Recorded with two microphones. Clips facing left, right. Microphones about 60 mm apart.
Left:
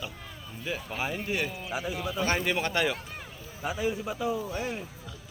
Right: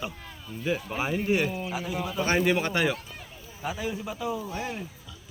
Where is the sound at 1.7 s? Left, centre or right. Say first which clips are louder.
Even; centre.